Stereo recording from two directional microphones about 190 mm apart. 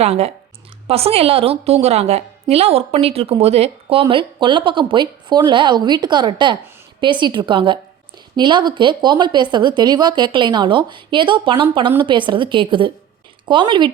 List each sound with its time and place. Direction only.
0.0 s a woman's voice: 35° right (ahead or behind)